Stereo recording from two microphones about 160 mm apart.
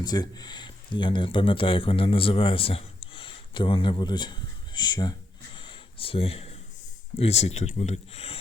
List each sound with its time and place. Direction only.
0.0 s speech: 25° left (ahead or behind)
5.5 s a sound: 30° left (ahead or behind)
7.2 s speech: 40° left (ahead or behind)